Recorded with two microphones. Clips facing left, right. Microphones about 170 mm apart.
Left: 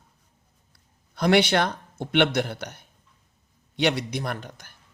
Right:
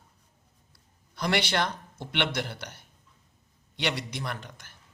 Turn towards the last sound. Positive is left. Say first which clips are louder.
# left 5 dB
turn(degrees=50)  # may be behind; listen again after turning